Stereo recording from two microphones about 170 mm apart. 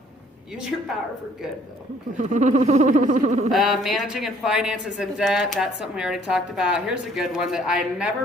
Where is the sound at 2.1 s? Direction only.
45° right (ahead or behind).